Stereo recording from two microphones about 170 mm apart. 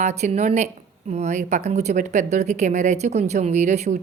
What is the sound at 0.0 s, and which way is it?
A woman's voice, 40° right (ahead or behind).